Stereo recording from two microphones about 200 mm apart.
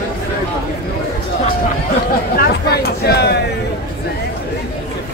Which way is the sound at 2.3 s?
50° left (ahead or behind).